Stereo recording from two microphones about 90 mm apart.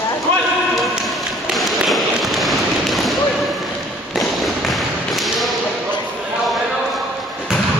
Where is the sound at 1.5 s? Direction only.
Centre (ahead or behind).